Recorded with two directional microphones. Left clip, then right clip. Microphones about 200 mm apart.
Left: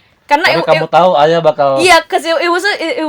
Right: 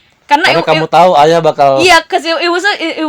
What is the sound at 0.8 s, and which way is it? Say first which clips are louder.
Speech: right 4 dB; 40° right (ahead or behind).